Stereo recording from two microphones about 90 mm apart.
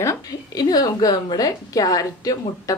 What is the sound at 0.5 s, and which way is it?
Speech, 45° left (ahead or behind).